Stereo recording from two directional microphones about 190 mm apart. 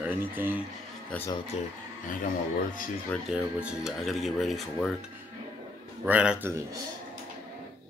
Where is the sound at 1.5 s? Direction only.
35° left (ahead or behind).